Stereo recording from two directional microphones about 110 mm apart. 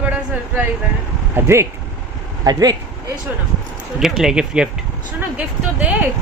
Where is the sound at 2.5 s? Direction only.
35° right (ahead or behind).